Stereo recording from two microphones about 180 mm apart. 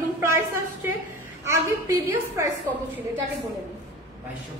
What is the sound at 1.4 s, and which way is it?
A woman's voice, 15° right (ahead or behind).